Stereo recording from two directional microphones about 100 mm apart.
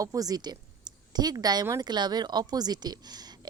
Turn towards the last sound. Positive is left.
turn(degrees=-45)  # may be behind; listen again after turning